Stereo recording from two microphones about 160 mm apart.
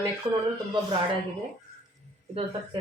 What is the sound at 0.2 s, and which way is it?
Speech, 30° right (ahead or behind).